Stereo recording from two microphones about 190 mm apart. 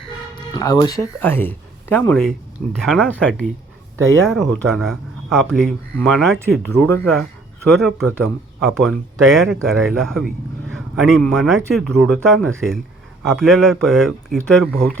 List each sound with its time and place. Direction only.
0.5 s speech: 20° left (ahead or behind); by 14.9 s 5° left (ahead or behind)